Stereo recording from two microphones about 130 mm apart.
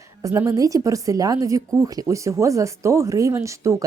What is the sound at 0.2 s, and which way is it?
Speech, 25° right (ahead or behind).